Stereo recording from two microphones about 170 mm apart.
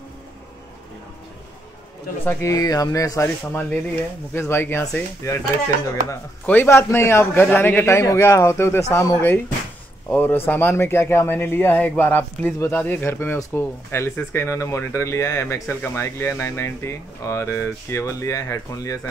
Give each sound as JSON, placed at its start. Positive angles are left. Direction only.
{"t": 2.2, "sound": "speech", "side_deg": 20}